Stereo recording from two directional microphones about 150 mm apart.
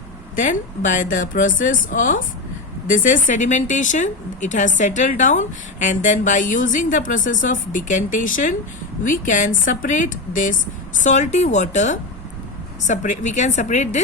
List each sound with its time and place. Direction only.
0.3 s a woman's voice: 60° left (ahead or behind)